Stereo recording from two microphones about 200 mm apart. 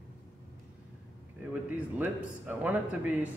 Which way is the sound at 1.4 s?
10° right (ahead or behind).